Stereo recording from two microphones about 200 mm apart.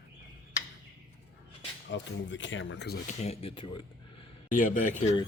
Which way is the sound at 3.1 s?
35° left (ahead or behind).